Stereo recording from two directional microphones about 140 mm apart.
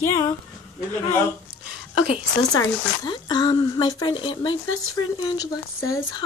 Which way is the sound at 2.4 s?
25° left (ahead or behind).